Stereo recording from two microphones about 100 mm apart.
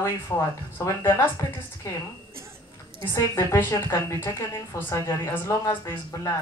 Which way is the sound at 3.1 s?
25° left (ahead or behind).